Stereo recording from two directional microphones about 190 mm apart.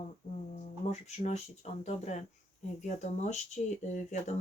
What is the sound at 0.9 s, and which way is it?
Speech, 35° left (ahead or behind).